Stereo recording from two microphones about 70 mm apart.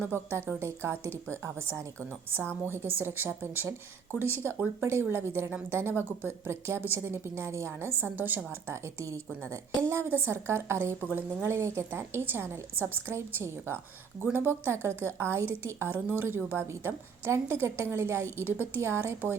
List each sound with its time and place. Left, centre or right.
0.0 s a woman's voice: right
8.6 s a woman's voice: right